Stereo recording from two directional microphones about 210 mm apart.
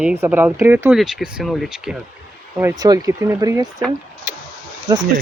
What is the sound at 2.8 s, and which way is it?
Speech, 15° right (ahead or behind).